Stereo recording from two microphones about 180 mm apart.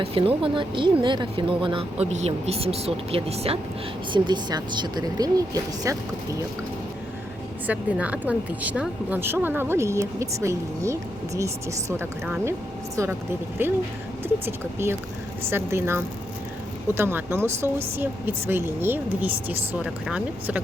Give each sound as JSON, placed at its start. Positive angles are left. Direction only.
{"t": 0.0, "sound": "speech", "side_deg": -30}
{"t": 4.1, "sound": "speech", "side_deg": -25}
{"t": 7.7, "sound": "speech", "side_deg": -10}